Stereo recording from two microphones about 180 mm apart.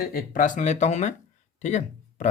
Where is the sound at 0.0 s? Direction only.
50° left (ahead or behind).